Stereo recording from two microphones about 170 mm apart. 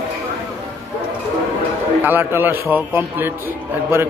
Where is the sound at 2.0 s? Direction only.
10° right (ahead or behind).